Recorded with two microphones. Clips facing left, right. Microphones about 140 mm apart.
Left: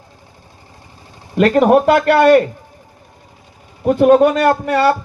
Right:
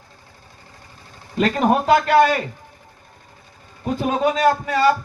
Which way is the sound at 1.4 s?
60° left (ahead or behind).